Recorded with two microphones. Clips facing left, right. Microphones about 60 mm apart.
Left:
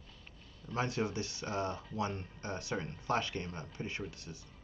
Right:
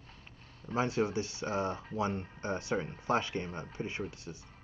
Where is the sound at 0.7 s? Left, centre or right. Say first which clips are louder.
Right 4 dB; right.